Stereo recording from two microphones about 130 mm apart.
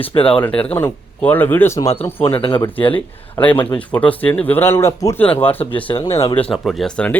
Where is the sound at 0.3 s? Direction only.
10° left (ahead or behind).